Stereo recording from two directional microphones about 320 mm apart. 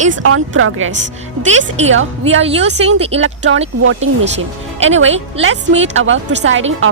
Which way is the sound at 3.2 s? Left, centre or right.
Right.